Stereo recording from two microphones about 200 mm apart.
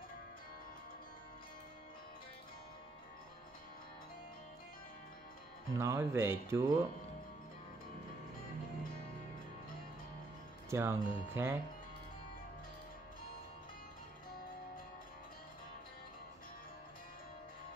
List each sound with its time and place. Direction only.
5.7 s speech: 15° right (ahead or behind)
10.7 s speech: 15° right (ahead or behind)